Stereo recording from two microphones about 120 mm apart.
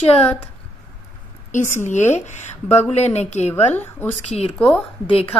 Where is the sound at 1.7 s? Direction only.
85° left.